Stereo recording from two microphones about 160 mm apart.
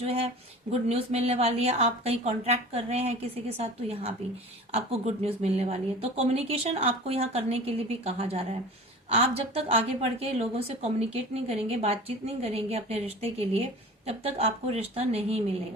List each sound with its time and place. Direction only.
0.0 s a woman's voice: 40° right (ahead or behind)